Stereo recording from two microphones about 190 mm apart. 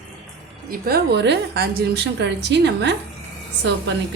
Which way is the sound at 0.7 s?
55° right (ahead or behind).